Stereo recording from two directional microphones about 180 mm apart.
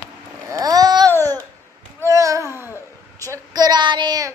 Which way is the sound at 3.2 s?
20° right (ahead or behind).